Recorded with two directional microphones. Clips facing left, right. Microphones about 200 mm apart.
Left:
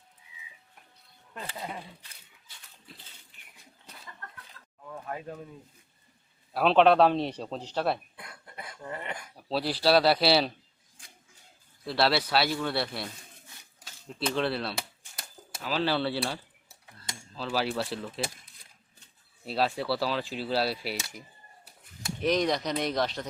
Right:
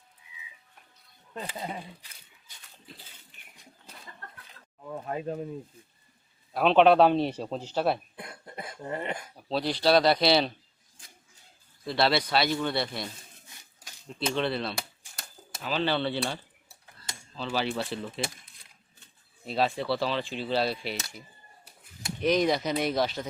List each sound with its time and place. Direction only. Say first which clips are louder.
1.3 s speech: right 2 dB; 15° right (ahead or behind)
4.6 s a sound: even; 25° right (ahead or behind)
4.9 s speech: right 5 dB; 25° right (ahead or behind)
6.5 s speech: right 1 dB; centre (ahead or behind)
8.1 s cough: right 5 dB; 25° right (ahead or behind)
9.3 s speech: left 1 dB; 5° left (ahead or behind)
11.9 s speech: right 1 dB; 5° left (ahead or behind)
14.3 s speech: even; 5° left (ahead or behind)
19.5 s speech: right 1 dB; 5° left (ahead or behind)
22.2 s speech: right 2 dB; centre (ahead or behind)